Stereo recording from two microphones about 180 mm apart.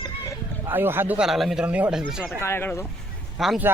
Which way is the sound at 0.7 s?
10° right (ahead or behind).